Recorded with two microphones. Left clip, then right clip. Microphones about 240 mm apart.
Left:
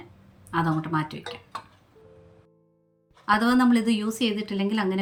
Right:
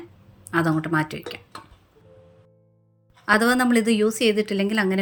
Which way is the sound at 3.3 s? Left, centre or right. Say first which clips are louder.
Right 2 dB; centre.